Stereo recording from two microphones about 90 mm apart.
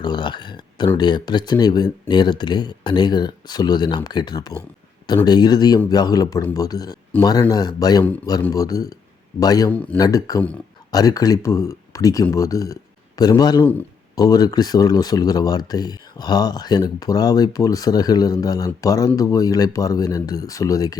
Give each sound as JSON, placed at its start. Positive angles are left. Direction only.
{"t": 0.0, "sound": "a sound", "side_deg": 55}
{"t": 0.9, "sound": "speech", "side_deg": 55}
{"t": 9.6, "sound": "speech", "side_deg": 15}
{"t": 10.0, "sound": "speech", "side_deg": 40}